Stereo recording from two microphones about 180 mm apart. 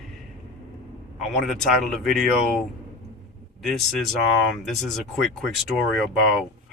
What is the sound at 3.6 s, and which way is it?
Speech, centre (ahead or behind).